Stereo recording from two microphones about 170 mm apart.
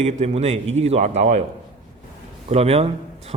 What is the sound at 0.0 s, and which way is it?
A man's voice, 40° right (ahead or behind).